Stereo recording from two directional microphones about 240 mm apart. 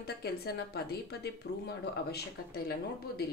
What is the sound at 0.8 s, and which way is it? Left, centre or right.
Speech, left.